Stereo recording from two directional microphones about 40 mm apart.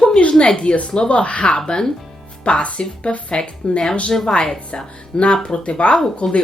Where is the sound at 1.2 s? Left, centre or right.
Left.